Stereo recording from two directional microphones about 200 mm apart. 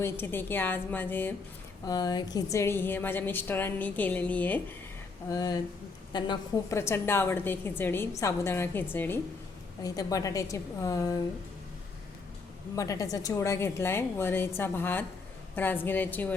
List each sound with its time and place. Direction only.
0.0 s a woman's voice: 10° left (ahead or behind)
1.9 s a woman's voice: 20° left (ahead or behind)
5.3 s a woman's voice: 20° left (ahead or behind)
12.7 s a woman's voice: 15° left (ahead or behind)